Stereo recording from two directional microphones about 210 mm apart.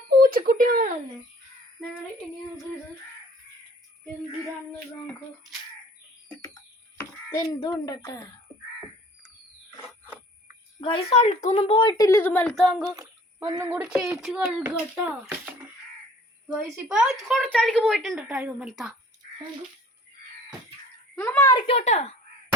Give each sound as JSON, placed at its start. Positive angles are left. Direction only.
{"t": 0.2, "sound": "speech", "side_deg": -40}
{"t": 6.2, "sound": "a sound", "side_deg": 15}
{"t": 7.7, "sound": "speech", "side_deg": 15}
{"t": 10.8, "sound": "speech", "side_deg": 25}
{"t": 13.0, "sound": "a sound", "side_deg": -15}
{"t": 13.7, "sound": "a child's voice", "side_deg": -5}
{"t": 16.5, "sound": "a woman's voice", "side_deg": -5}
{"t": 21.2, "sound": "speech", "side_deg": 10}
{"t": 21.7, "sound": "speech", "side_deg": 30}